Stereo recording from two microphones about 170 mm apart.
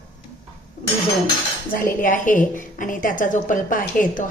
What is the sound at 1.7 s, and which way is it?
A woman's voice, 55° left (ahead or behind).